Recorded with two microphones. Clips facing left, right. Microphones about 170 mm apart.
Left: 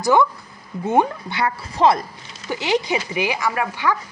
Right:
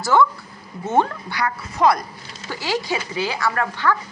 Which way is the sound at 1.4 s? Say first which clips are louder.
Left 1 dB; 25° left (ahead or behind).